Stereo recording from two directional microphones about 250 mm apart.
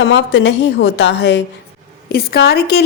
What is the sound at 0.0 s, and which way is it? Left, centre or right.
A woman's voice, left.